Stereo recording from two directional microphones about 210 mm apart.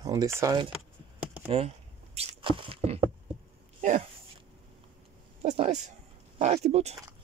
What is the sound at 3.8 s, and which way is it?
Speech, 35° right (ahead or behind).